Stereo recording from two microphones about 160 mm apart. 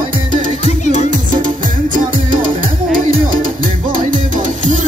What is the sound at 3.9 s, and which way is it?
Music, 55° right (ahead or behind).